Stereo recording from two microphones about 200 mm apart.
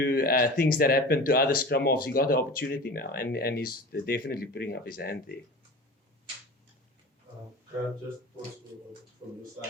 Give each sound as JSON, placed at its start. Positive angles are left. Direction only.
{"t": 0.0, "sound": "speech", "side_deg": 50}